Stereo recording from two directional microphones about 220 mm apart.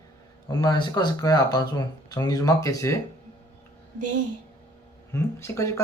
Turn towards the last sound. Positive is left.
turn(degrees=15)  # may be behind; listen again after turning